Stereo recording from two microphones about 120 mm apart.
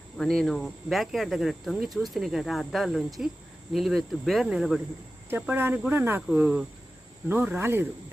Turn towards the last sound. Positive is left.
turn(degrees=-20)  # may be behind; listen again after turning